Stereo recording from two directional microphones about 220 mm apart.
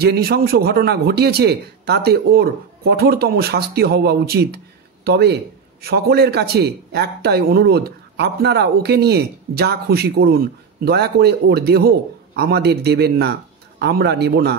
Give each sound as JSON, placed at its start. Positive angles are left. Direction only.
{"t": 0.0, "sound": "a man's voice", "side_deg": -45}